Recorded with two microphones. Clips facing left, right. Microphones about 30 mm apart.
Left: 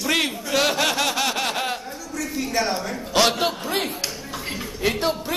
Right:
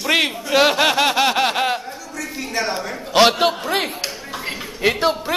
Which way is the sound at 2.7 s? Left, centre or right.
Right.